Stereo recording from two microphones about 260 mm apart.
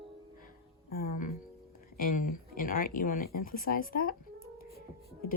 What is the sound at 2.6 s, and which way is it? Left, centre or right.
Speech, left.